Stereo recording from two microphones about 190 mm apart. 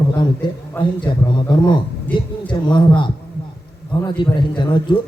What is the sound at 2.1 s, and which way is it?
A man's voice, 25° left (ahead or behind).